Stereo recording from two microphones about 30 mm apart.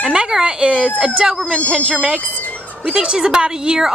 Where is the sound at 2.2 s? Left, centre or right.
Left.